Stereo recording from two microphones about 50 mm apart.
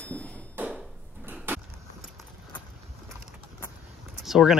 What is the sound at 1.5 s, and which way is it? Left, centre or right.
Vehicle, right.